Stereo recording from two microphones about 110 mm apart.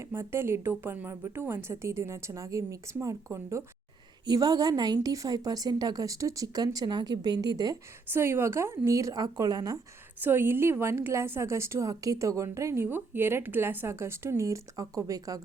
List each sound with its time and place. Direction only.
0.0 s a woman's voice: 20° right (ahead or behind)
8.1 s a woman's voice: 20° right (ahead or behind)
10.2 s a woman's voice: 20° right (ahead or behind)